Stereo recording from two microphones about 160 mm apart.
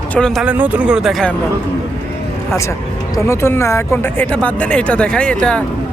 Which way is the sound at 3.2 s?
15° left (ahead or behind).